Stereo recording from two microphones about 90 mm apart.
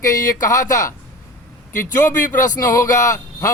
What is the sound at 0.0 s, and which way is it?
Speech, 35° left (ahead or behind).